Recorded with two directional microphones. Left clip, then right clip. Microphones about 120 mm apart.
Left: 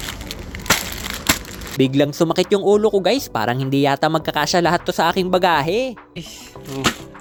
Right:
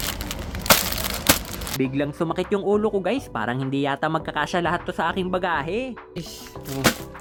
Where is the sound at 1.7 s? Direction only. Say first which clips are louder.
Left 8 dB; 35° left (ahead or behind).